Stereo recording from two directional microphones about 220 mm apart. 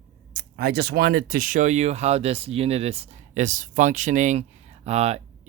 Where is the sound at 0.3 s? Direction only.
45° right (ahead or behind).